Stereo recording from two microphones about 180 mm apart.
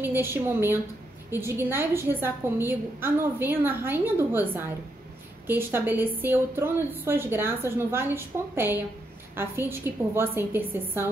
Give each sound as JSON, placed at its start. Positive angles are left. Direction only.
{"t": 0.0, "sound": "a woman's voice", "side_deg": -10}